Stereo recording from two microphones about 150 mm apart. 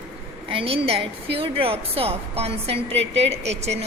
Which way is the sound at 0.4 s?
40° right (ahead or behind).